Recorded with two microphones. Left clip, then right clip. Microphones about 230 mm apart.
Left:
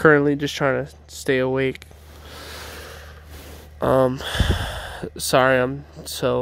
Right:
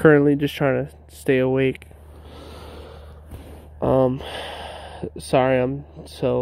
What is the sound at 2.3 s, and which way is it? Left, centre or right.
Snort, centre.